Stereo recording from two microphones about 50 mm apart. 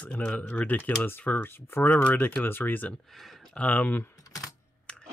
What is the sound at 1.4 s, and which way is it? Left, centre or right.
Speech, left.